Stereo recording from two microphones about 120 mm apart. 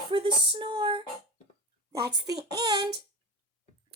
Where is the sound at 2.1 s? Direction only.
35° right (ahead or behind).